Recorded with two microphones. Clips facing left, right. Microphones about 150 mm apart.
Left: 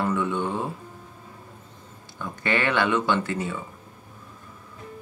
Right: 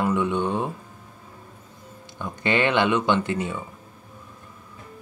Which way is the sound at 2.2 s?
20° right (ahead or behind).